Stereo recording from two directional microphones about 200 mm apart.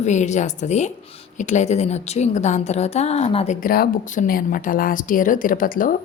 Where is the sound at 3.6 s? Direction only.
50° left (ahead or behind).